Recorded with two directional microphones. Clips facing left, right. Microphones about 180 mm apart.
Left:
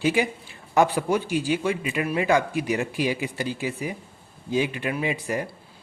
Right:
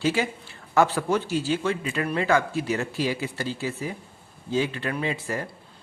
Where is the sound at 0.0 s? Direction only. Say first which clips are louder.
Left 2 dB; 15° left (ahead or behind).